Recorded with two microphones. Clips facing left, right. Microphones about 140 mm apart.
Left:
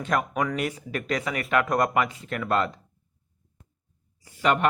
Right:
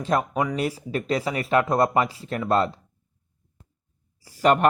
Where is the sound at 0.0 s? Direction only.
30° right (ahead or behind).